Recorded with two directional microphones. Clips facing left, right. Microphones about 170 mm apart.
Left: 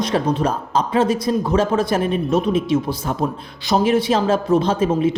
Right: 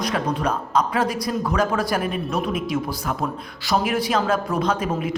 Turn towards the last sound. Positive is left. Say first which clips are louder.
# left 5 dB
turn(degrees=25)  # may be behind; listen again after turning